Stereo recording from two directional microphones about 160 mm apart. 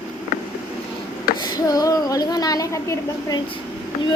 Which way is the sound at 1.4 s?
25° left (ahead or behind).